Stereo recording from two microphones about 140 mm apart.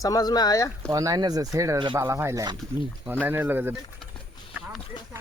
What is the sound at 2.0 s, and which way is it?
Speech, 20° right (ahead or behind).